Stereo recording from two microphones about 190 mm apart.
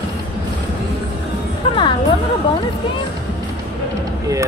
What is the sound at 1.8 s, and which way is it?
Music, 25° left (ahead or behind).